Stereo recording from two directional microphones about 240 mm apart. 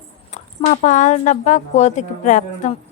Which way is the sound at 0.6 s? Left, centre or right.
Left.